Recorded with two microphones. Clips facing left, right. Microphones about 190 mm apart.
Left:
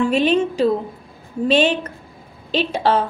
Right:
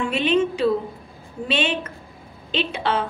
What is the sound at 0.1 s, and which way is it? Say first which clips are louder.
A woman's voice: left 3 dB; 40° left (ahead or behind).